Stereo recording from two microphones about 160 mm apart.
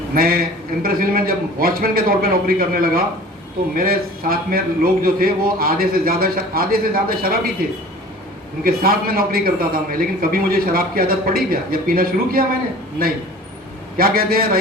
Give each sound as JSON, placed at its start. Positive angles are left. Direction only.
{"t": 0.1, "sound": "a man's voice", "side_deg": -65}
{"t": 8.6, "sound": "a man's voice", "side_deg": -65}
{"t": 13.9, "sound": "a man's voice", "side_deg": -65}